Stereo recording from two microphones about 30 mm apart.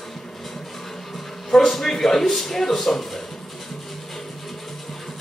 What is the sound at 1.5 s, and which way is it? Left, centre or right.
A man's voice, centre.